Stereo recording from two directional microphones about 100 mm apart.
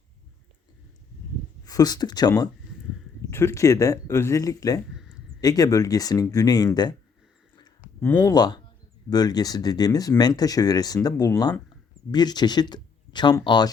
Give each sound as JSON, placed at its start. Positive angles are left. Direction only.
{"t": 1.6, "sound": "speech", "side_deg": 40}
{"t": 3.2, "sound": "speech", "side_deg": 30}
{"t": 8.1, "sound": "speech", "side_deg": 35}